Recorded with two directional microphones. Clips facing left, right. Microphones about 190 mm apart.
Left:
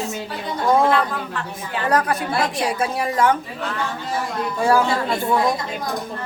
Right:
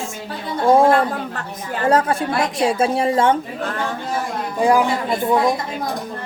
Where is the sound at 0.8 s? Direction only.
45° right (ahead or behind).